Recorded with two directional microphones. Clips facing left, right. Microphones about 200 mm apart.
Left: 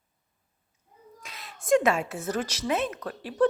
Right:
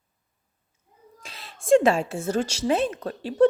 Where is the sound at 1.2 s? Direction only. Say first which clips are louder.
Right 1 dB; 30° right (ahead or behind).